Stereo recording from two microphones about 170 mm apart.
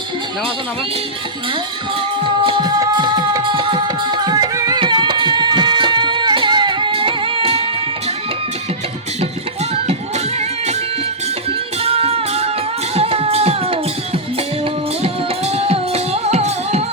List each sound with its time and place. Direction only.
2.2 s music: 30° right (ahead or behind)
11.8 s music: 35° right (ahead or behind)